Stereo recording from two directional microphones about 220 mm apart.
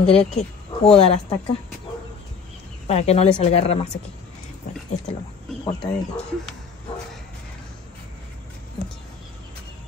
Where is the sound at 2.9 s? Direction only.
30° left (ahead or behind).